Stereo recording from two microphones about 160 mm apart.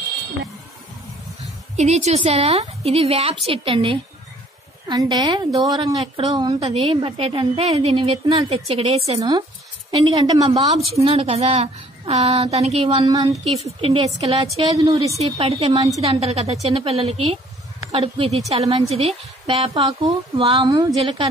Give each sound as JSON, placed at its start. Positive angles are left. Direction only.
{"t": 1.8, "sound": "a woman's voice", "side_deg": -45}
{"t": 9.8, "sound": "a woman's voice", "side_deg": -30}
{"t": 11.1, "sound": "a woman's voice", "side_deg": -35}
{"t": 13.7, "sound": "a woman's voice", "side_deg": -35}
{"t": 14.6, "sound": "a woman's voice", "side_deg": -25}
{"t": 15.1, "sound": "a woman's voice", "side_deg": -40}
{"t": 21.0, "sound": "a woman's voice", "side_deg": -35}